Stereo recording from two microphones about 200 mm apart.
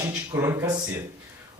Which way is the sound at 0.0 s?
15° right (ahead or behind).